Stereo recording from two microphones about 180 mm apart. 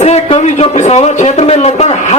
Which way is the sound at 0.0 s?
35° left (ahead or behind).